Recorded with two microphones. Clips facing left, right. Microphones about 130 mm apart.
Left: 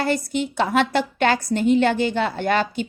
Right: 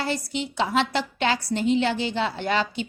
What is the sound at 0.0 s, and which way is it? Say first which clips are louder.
A woman's voice: left 5 dB; 50° left (ahead or behind).